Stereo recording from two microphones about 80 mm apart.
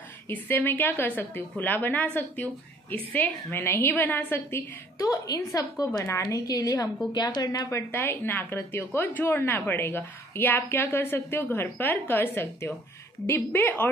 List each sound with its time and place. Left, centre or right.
0.3 s a woman's voice: left
7.1 s a woman's voice: left
7.7 s a woman's voice: left